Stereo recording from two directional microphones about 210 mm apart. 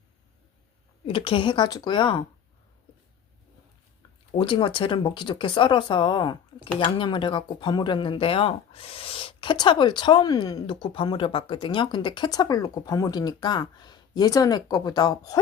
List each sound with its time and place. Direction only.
1.0 s speech: 25° left (ahead or behind)
4.4 s speech: 25° left (ahead or behind)